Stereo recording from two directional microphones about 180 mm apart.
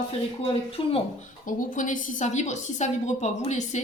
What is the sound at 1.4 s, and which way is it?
A woman's voice, 45° left (ahead or behind).